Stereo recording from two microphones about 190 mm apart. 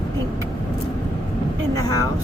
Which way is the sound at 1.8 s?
20° left (ahead or behind).